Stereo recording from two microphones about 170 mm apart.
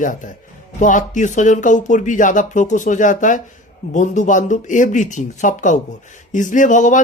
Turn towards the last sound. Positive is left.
turn(degrees=45)  # may be behind; listen again after turning